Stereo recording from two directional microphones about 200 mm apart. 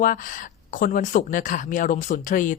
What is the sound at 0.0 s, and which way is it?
Speech, 40° left (ahead or behind).